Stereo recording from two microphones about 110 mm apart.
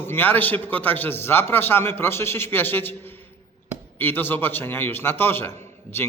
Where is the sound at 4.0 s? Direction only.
20° left (ahead or behind).